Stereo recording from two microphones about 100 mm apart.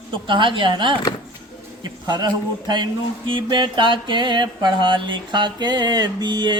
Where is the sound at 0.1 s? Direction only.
55° right (ahead or behind).